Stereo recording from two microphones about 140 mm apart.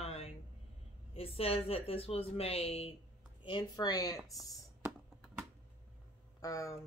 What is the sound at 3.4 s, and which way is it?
Speech, 30° left (ahead or behind).